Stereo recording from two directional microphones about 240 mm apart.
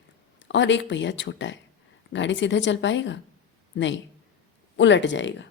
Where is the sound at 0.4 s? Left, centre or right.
Left.